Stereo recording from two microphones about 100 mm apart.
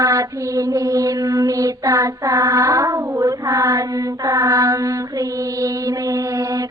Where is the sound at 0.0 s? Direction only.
40° right (ahead or behind).